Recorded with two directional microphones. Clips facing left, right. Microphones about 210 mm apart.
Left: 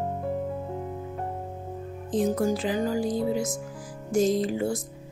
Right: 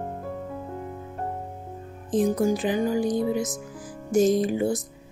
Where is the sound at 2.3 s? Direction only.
15° right (ahead or behind).